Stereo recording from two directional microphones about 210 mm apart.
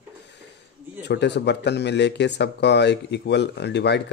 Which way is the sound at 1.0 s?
55° left (ahead or behind).